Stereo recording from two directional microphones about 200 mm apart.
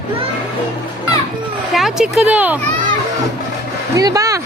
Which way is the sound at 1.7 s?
Centre (ahead or behind).